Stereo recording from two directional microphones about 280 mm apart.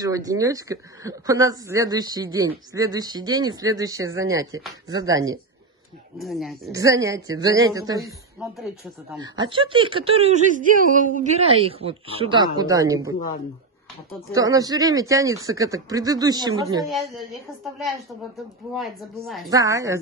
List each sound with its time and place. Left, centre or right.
0.0 s speech: centre
6.1 s a woman's voice: centre
6.7 s speech: centre
8.0 s speech: centre
9.1 s speech: centre
14.3 s speech: centre
16.8 s a woman's voice: centre
19.5 s speech: centre